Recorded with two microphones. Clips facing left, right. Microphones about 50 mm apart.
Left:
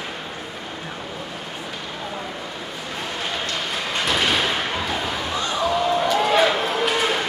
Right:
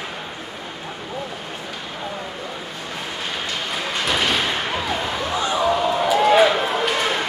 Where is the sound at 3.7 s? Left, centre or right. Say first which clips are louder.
Right 1 dB; centre.